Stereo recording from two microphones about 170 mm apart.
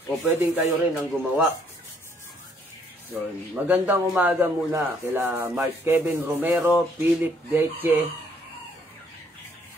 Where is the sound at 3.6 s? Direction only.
10° right (ahead or behind).